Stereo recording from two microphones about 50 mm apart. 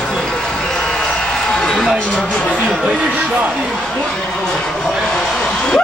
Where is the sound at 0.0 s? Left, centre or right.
Centre.